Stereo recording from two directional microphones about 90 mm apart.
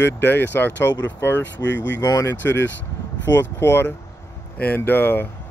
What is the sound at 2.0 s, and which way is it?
Speech, 40° left (ahead or behind).